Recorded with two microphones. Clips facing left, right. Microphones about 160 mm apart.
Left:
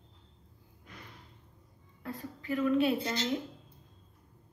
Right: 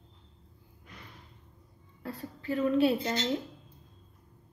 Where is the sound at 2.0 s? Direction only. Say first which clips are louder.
Right 1 dB; 35° right (ahead or behind).